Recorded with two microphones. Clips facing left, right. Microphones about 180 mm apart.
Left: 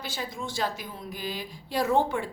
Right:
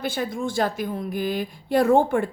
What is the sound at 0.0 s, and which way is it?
A woman's voice, 55° right (ahead or behind).